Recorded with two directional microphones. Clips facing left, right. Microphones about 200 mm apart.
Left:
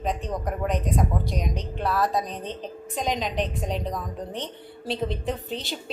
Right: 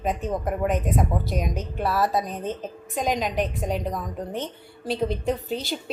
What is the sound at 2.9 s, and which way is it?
A woman's voice, centre (ahead or behind).